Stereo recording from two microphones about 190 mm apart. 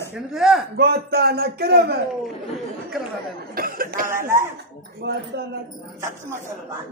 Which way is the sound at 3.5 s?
50° right (ahead or behind).